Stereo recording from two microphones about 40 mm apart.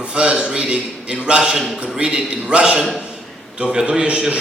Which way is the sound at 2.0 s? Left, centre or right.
Right.